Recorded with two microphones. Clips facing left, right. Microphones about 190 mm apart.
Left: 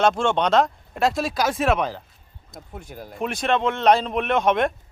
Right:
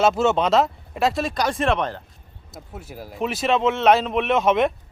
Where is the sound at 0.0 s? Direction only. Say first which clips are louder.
Right 1 dB; 5° right (ahead or behind).